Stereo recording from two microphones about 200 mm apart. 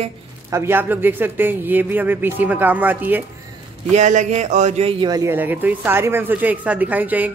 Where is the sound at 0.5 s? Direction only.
10° right (ahead or behind).